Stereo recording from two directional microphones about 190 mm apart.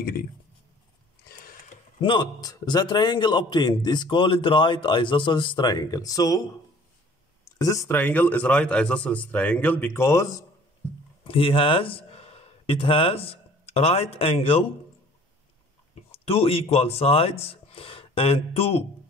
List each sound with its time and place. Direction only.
0.0 s speech: 50° left (ahead or behind)
1.4 s a sound: 45° left (ahead or behind)
2.0 s a man's voice: 25° left (ahead or behind)
7.5 s a man's voice: 15° left (ahead or behind)
11.2 s speech: 30° left (ahead or behind)
16.3 s speech: 30° left (ahead or behind)